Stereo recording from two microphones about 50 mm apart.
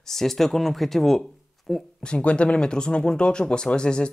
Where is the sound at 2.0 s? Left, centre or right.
Left.